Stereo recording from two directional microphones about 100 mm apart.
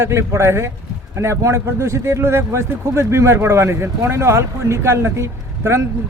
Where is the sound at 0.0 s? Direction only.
25° right (ahead or behind).